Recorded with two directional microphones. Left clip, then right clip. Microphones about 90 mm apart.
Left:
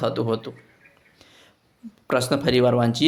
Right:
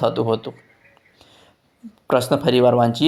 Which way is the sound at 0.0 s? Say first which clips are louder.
Right 4 dB; 15° right (ahead or behind).